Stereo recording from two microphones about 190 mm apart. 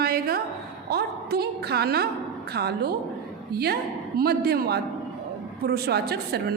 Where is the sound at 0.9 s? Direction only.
55° right (ahead or behind).